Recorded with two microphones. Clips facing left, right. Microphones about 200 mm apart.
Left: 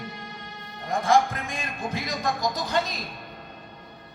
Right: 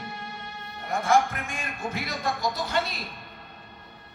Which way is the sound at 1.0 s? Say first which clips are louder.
Left 1 dB; 35° left (ahead or behind).